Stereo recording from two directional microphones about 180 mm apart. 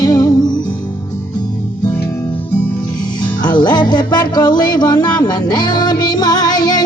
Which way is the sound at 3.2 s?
25° left (ahead or behind).